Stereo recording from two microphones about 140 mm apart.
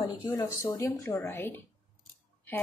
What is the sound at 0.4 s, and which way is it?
A woman's voice, 25° left (ahead or behind).